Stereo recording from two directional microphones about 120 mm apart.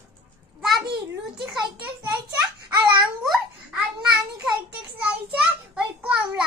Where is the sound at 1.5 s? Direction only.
10° right (ahead or behind).